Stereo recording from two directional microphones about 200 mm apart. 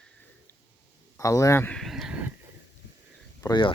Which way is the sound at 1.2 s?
15° left (ahead or behind).